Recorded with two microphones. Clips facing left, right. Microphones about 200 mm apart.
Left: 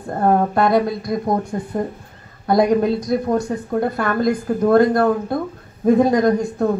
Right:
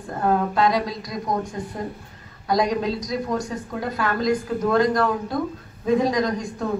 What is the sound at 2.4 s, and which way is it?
Speech, 55° left (ahead or behind).